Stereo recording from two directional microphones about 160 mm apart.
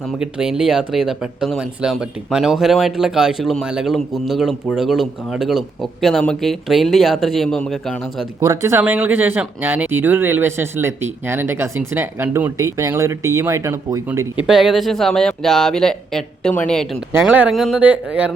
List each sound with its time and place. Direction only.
0.2 s speech: 5° right (ahead or behind)
8.4 s speech: 15° right (ahead or behind)
14.3 s speech: 5° right (ahead or behind)
17.1 s speech: 10° right (ahead or behind)